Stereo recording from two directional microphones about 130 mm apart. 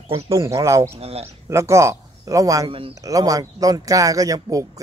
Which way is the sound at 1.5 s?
20° right (ahead or behind).